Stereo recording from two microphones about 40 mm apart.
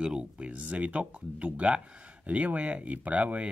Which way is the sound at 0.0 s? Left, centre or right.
Right.